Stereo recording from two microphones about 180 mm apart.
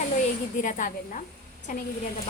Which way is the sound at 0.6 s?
45° left (ahead or behind).